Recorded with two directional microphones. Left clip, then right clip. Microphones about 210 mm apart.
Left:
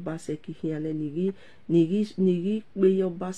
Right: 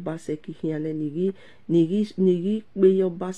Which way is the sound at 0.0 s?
20° right (ahead or behind).